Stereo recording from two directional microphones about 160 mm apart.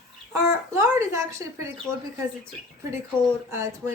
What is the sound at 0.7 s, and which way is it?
A woman's voice, 15° right (ahead or behind).